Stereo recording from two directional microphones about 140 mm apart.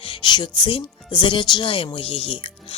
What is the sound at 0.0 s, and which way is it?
Speech, 35° left (ahead or behind).